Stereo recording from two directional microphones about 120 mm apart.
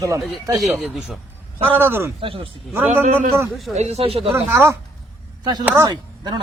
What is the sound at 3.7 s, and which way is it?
Speech, 65° right (ahead or behind).